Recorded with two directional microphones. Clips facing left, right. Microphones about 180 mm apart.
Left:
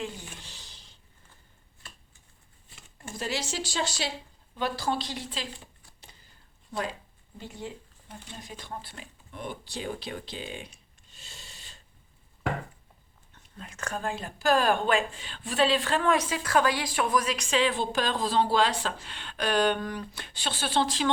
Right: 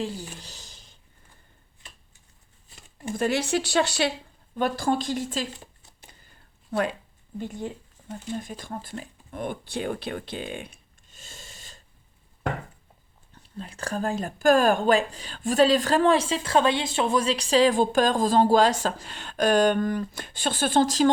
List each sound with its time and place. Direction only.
0.0 s a sound: 35° right (ahead or behind)
3.2 s speech: 55° right (ahead or behind)
4.5 s speech: 50° right (ahead or behind)
6.7 s speech: 65° right (ahead or behind)
7.3 s speech: 50° right (ahead or behind)
13.3 s speech: 35° right (ahead or behind)